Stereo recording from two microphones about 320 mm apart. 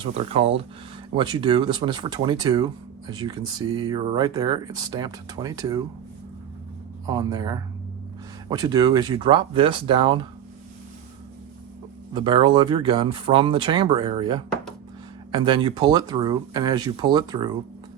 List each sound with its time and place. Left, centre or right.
0.3 s speech: centre
7.1 s speech: centre
12.1 s speech: centre